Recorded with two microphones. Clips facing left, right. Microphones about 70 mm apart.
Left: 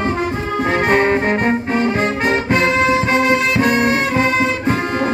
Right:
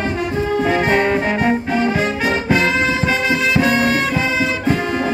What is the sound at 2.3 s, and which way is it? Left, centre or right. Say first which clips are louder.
Music: left 1 dB; left.